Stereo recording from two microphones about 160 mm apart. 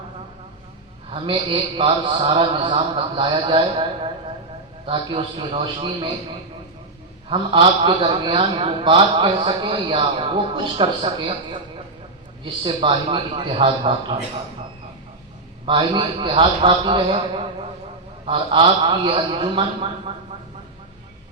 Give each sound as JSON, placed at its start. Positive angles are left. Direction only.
{"t": 1.1, "sound": "a man's voice", "side_deg": -35}
{"t": 7.3, "sound": "a man's voice", "side_deg": -35}
{"t": 12.6, "sound": "a man's voice", "side_deg": -30}
{"t": 15.6, "sound": "a man's voice", "side_deg": -30}